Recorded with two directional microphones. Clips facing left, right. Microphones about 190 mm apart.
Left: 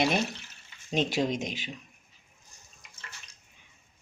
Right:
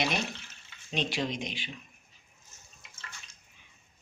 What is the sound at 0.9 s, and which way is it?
Speech, 45° left (ahead or behind).